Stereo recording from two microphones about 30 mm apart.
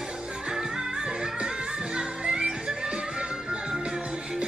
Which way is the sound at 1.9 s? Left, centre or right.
Right.